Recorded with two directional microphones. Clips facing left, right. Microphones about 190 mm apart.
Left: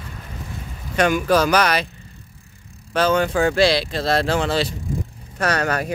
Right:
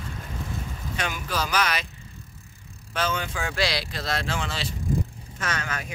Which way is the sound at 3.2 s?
50° left (ahead or behind).